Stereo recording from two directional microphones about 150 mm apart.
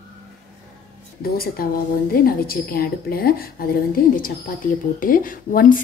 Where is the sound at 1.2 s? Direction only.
90° left.